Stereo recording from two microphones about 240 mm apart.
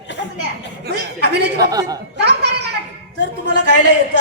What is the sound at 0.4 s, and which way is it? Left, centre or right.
A woman's voice, right.